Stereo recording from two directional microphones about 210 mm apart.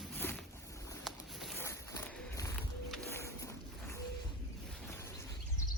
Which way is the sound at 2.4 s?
5° left (ahead or behind).